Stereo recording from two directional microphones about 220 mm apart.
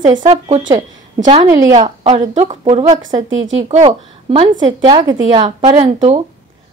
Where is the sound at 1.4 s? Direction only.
15° right (ahead or behind).